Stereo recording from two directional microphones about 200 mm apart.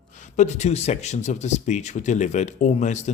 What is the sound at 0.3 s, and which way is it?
Speech, 35° left (ahead or behind).